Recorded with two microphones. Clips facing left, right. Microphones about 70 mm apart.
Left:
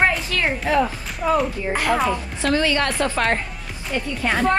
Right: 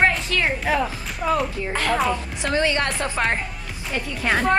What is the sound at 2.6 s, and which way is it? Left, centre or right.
Speech, right.